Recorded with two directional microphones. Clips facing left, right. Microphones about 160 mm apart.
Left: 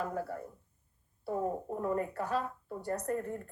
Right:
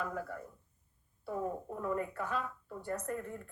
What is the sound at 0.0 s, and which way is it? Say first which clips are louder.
Speech: left 3 dB; 35° left (ahead or behind).